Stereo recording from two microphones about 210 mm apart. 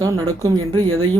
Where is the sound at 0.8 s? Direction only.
80° right.